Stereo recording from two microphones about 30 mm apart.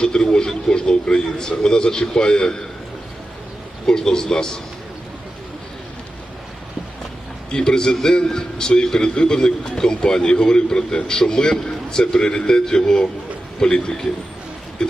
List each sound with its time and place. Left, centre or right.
0.0 s a man's voice: left
3.8 s a man's voice: left
7.5 s a man's voice: left